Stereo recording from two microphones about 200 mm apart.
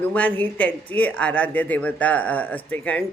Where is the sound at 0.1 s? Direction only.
10° left (ahead or behind).